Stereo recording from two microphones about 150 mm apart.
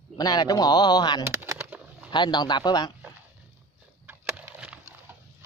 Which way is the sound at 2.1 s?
30° left (ahead or behind).